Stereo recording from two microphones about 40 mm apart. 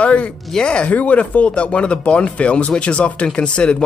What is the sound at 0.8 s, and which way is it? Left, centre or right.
Speech, left.